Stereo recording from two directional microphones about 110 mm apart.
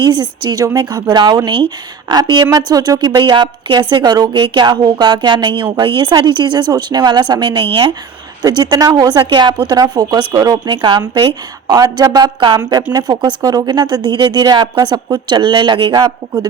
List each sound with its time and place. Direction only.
0.0 s a woman's voice: 40° right (ahead or behind)